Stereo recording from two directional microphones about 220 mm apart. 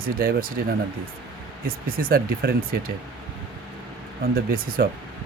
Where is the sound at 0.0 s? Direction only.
40° right (ahead or behind).